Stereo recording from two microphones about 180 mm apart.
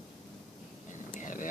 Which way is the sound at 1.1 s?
45° left (ahead or behind).